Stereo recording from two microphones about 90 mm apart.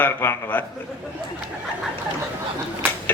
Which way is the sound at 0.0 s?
25° left (ahead or behind).